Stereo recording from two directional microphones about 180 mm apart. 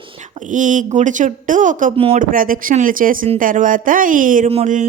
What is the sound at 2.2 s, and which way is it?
Speech, 50° right (ahead or behind).